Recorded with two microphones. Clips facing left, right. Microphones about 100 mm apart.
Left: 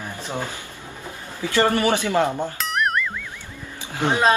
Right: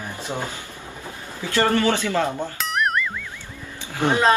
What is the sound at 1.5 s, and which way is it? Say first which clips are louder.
Speech: even; 15° left (ahead or behind).